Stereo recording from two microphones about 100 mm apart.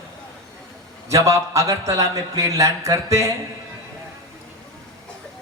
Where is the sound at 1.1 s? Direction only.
35° right (ahead or behind).